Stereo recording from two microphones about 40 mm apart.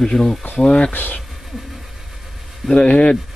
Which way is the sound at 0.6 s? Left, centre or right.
Left.